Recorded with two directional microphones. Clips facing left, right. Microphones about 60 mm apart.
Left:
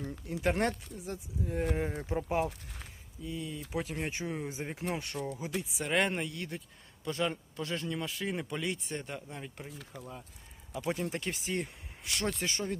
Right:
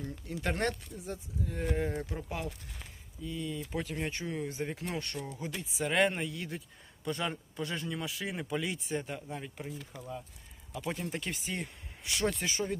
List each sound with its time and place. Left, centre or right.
0.0 s speech: centre
2.0 s speech: left
3.2 s speech: centre